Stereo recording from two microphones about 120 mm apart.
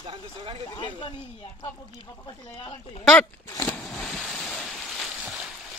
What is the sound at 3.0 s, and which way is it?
Speech, 10° left (ahead or behind).